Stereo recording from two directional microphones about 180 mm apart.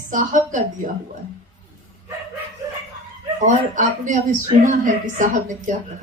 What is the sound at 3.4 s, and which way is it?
Speech, 45° right (ahead or behind).